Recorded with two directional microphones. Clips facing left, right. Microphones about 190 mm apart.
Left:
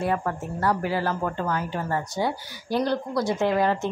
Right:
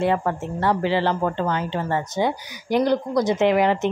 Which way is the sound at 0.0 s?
25° right (ahead or behind).